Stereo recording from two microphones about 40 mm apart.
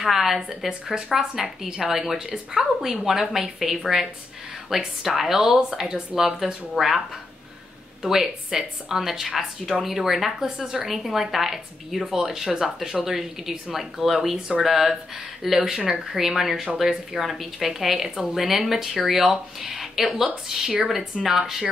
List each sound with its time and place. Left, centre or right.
0.0 s speech: centre
0.7 s a woman's voice: centre
2.8 s a woman's voice: centre
8.0 s a woman's voice: centre